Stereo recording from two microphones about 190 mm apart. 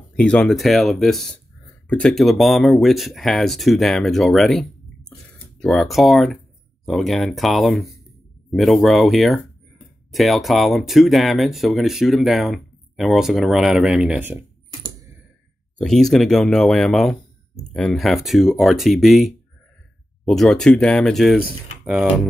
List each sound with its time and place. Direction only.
0.1 s speech: 5° left (ahead or behind)
14.7 s typewriter: 20° right (ahead or behind)
15.8 s speech: centre (ahead or behind)